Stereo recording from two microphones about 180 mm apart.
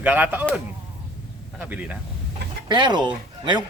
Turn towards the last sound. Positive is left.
turn(degrees=-25)  # may be behind; listen again after turning